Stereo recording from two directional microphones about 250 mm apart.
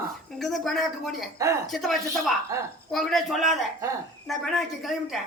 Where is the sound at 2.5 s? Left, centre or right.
Centre.